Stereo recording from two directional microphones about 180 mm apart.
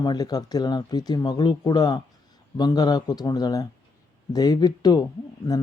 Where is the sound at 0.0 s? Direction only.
20° left (ahead or behind).